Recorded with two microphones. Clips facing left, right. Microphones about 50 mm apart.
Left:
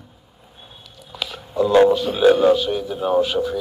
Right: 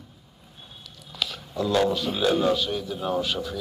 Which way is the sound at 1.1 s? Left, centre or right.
Centre.